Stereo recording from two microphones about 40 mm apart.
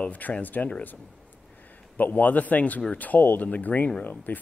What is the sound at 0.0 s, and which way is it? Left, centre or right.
Speech, left.